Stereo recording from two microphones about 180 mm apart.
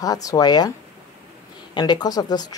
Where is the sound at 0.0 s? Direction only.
20° left (ahead or behind).